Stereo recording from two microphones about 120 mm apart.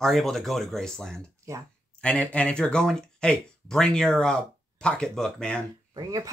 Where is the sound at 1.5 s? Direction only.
25° right (ahead or behind).